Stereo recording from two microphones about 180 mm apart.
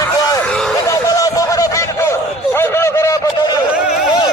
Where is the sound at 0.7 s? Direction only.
20° left (ahead or behind).